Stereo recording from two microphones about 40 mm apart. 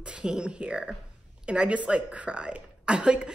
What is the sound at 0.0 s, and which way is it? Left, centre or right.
A woman's voice, right.